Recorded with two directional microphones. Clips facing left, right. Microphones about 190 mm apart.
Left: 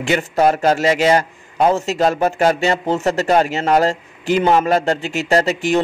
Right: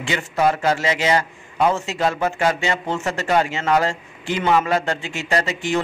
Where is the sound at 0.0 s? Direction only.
45° left (ahead or behind).